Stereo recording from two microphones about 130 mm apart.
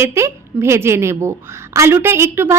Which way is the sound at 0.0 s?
20° right (ahead or behind).